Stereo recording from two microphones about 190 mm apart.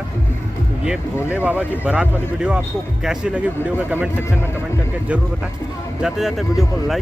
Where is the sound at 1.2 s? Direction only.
5° right (ahead or behind).